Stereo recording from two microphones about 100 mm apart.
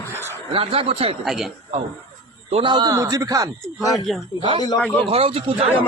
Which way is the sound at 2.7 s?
50° right (ahead or behind).